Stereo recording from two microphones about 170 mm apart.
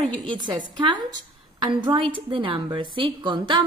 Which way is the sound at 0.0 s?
30° right (ahead or behind).